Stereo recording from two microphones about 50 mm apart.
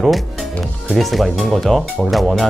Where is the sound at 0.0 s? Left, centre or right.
Centre.